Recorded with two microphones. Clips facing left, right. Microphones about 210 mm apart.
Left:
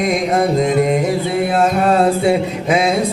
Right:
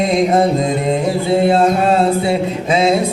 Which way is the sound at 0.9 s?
25° right (ahead or behind).